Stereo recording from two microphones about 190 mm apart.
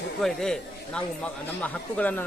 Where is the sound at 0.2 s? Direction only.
Centre (ahead or behind).